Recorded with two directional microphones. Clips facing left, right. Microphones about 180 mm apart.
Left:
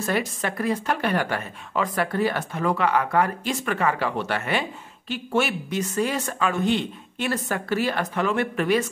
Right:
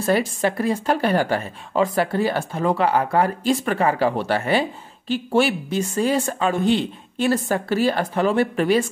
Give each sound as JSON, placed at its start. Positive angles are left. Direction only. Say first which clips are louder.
{"t": 0.0, "sound": "speech", "louder": "right 6 dB", "side_deg": -30}